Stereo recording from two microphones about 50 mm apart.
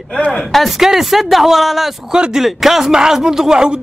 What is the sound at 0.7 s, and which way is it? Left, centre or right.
Speech, centre.